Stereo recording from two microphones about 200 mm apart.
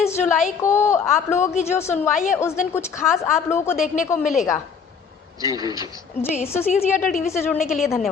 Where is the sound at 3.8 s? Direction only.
40° left (ahead or behind).